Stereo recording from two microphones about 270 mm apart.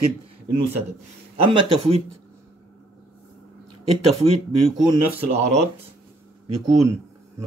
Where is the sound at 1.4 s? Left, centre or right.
Centre.